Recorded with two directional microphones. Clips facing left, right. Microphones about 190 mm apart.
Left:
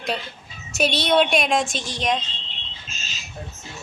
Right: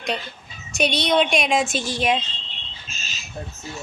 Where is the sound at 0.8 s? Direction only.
Centre (ahead or behind).